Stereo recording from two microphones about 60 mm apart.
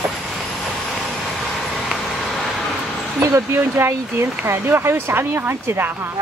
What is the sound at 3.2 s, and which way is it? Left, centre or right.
Speech, right.